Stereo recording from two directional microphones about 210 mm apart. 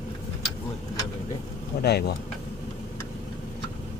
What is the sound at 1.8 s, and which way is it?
Speech, 50° left (ahead or behind).